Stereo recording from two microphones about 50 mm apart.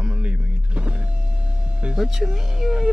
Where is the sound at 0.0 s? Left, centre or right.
Right.